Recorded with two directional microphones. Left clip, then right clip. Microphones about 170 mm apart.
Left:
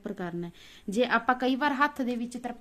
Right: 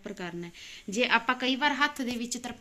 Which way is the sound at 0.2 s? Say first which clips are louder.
Left 2 dB; 60° left (ahead or behind).